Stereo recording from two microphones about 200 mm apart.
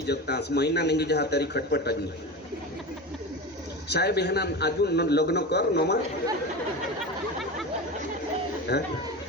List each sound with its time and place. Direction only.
0.1 s a man's voice: 55° left (ahead or behind)
3.8 s a man's voice: 55° left (ahead or behind)
8.7 s a man's voice: 60° left (ahead or behind)